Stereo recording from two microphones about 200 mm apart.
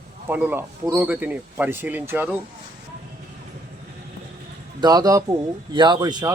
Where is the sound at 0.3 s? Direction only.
10° right (ahead or behind).